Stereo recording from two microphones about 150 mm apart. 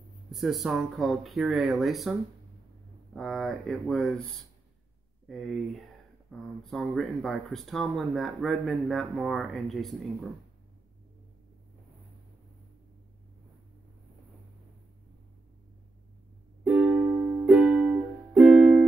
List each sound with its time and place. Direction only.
0.3 s speech: centre (ahead or behind)
5.3 s speech: centre (ahead or behind)
16.7 s music: 10° right (ahead or behind)